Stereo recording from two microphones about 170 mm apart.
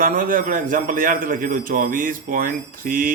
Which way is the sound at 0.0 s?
55° right (ahead or behind).